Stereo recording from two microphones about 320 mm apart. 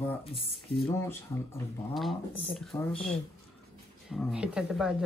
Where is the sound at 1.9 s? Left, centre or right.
Centre.